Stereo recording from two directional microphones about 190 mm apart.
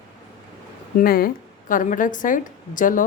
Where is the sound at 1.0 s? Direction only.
50° left (ahead or behind).